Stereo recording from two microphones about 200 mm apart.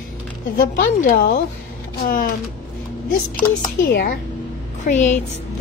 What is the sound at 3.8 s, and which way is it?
A woman's voice, 45° left (ahead or behind).